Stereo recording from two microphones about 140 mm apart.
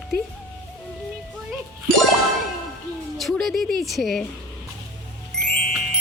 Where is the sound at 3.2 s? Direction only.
Centre (ahead or behind).